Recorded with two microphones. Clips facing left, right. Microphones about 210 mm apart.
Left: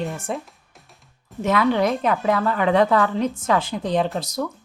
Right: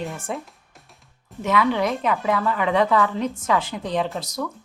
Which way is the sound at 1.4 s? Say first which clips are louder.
Left 2 dB; 40° left (ahead or behind).